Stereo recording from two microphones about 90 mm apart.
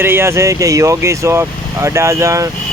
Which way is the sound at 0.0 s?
30° right (ahead or behind).